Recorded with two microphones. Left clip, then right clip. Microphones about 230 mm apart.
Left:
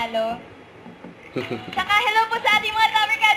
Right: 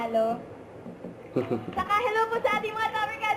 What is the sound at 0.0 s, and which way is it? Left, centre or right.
Speech, centre.